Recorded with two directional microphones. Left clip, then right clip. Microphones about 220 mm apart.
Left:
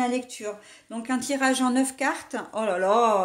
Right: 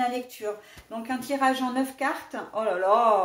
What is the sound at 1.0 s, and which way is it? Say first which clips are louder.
Speech: even; 45° left (ahead or behind).